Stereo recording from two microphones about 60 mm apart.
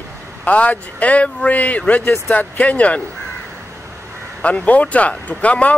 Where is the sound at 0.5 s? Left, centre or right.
Left.